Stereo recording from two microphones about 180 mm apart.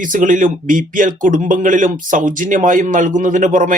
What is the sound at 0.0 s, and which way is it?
Speech, 45° right (ahead or behind).